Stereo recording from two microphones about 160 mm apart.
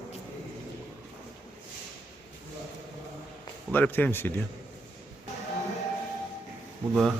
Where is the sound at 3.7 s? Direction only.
10° left (ahead or behind).